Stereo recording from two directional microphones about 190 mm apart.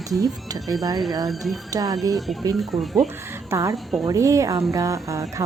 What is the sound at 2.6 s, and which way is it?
Speech, centre (ahead or behind).